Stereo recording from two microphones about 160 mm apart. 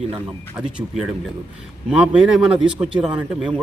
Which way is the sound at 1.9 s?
5° right (ahead or behind).